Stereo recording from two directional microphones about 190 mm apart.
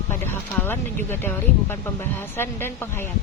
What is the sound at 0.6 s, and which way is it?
A woman's voice, 10° left (ahead or behind).